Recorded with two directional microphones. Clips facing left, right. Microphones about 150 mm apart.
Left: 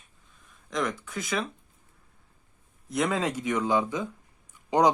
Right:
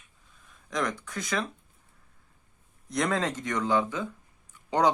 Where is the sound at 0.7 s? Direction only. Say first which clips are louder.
Left 1 dB; centre (ahead or behind).